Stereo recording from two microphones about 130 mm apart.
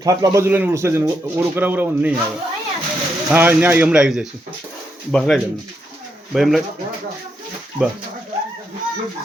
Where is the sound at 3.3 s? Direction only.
15° right (ahead or behind).